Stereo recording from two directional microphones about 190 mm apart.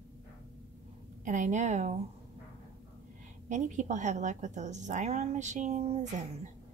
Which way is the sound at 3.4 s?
40° right (ahead or behind).